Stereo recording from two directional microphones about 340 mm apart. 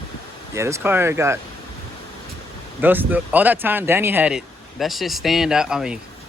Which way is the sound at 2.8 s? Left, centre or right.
Centre.